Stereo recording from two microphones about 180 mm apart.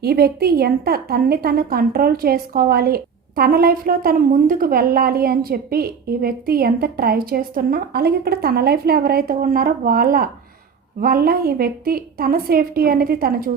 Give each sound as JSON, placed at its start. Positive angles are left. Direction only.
{"t": 0.0, "sound": "a woman's voice", "side_deg": -60}